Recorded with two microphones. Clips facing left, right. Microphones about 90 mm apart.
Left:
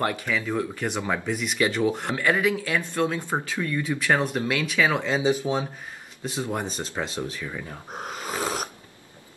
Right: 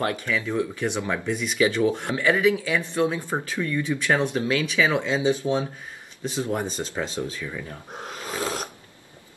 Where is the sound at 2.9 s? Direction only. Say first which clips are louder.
Right 2 dB; 15° right (ahead or behind).